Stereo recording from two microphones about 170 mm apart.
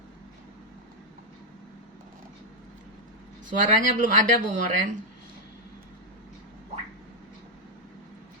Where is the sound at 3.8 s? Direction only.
50° right (ahead or behind).